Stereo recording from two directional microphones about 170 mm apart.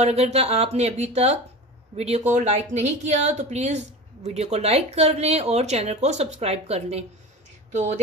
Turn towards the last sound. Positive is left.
turn(degrees=-45)  # may be behind; listen again after turning